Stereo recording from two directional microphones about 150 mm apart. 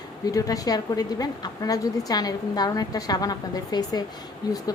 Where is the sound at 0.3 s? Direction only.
25° left (ahead or behind).